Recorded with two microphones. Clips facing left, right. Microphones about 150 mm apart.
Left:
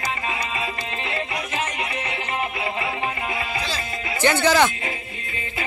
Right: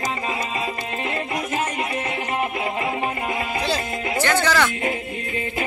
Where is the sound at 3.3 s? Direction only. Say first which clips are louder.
Right 4 dB; 55° right (ahead or behind).